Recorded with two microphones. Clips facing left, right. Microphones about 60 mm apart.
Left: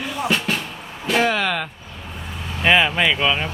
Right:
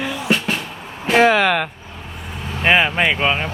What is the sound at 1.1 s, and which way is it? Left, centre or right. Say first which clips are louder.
Speech: right 6 dB; right.